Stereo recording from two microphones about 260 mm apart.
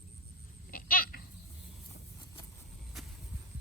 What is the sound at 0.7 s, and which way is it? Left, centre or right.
Goat, left.